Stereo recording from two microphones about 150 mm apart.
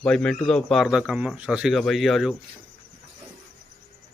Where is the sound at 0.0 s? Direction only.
5° left (ahead or behind).